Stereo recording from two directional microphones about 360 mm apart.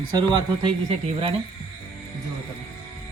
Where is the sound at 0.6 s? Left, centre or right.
Centre.